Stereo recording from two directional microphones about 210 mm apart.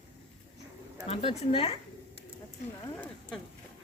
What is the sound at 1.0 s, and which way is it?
Speech, 30° left (ahead or behind).